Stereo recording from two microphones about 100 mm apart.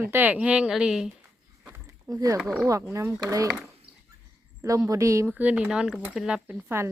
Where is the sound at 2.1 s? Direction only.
35° right (ahead or behind).